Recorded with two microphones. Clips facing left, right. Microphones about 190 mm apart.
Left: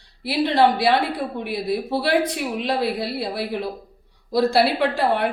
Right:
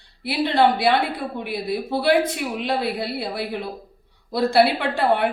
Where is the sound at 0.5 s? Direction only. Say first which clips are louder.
Even; centre (ahead or behind).